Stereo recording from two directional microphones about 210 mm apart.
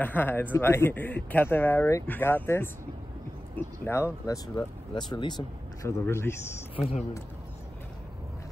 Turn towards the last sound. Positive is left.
turn(degrees=30)  # may be behind; listen again after turning